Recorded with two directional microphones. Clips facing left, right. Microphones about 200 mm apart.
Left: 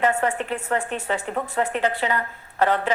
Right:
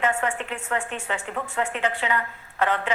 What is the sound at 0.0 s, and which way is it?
A woman's voice, 40° left (ahead or behind).